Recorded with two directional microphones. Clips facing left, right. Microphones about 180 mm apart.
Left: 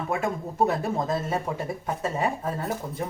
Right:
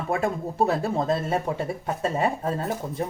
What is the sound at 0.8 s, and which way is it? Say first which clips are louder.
Speech: right 2 dB; 30° right (ahead or behind).